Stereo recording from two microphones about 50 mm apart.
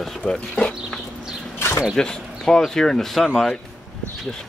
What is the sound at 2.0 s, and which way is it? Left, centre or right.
Speech, centre.